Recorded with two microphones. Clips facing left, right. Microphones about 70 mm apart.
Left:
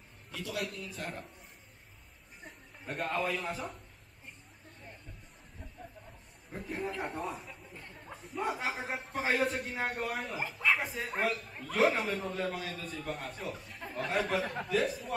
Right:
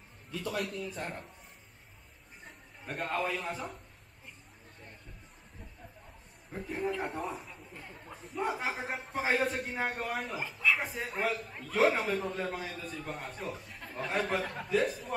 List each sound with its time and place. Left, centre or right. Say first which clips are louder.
0.4 s a man's voice: right 2 dB; right
0.7 s a man's voice: right 3 dB; centre
2.4 s a man's voice: left 1 dB; centre
6.5 s a man's voice: right 3 dB; centre